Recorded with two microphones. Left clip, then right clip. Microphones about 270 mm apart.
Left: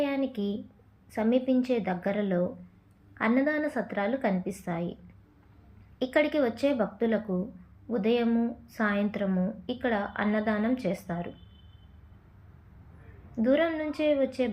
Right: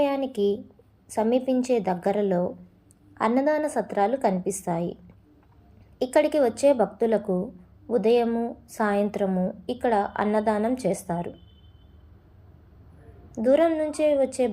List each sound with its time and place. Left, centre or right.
0.0 s a sound: centre
1.1 s a woman's voice: centre
6.0 s a woman's voice: centre
13.4 s a woman's voice: centre